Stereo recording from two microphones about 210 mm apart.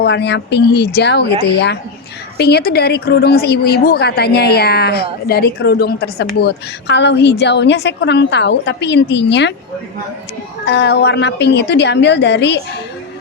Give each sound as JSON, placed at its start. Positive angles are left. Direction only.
{"t": 0.0, "sound": "a woman's voice", "side_deg": 55}
{"t": 10.7, "sound": "a woman's voice", "side_deg": 55}